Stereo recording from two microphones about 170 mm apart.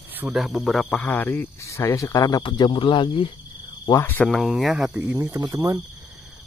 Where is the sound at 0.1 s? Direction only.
5° right (ahead or behind); by 3.3 s 30° left (ahead or behind).